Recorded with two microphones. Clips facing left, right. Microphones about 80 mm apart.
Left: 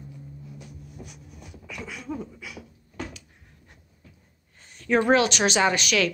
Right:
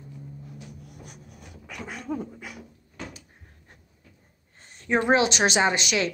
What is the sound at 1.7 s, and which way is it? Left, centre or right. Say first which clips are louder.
Dog: right 2 dB; right.